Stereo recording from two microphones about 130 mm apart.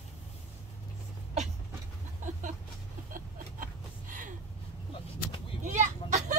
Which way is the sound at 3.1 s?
90° right.